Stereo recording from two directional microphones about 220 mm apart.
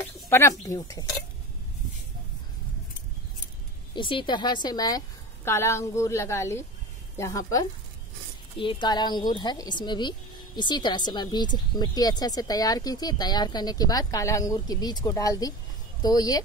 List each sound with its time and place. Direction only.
0.0 s speech: 10° left (ahead or behind)
3.9 s speech: 20° left (ahead or behind)